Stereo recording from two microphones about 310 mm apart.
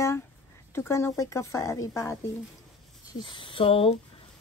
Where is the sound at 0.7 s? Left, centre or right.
Centre.